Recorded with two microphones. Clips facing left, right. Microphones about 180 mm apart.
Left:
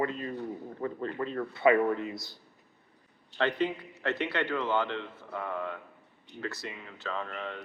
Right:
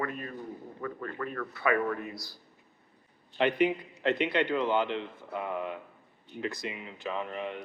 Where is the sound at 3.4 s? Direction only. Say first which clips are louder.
Right 3 dB; 15° right (ahead or behind).